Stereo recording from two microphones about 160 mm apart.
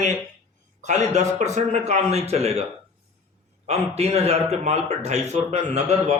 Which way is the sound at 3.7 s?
40° right (ahead or behind).